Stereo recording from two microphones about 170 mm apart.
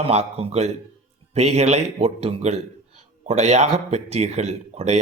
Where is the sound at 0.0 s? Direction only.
35° right (ahead or behind).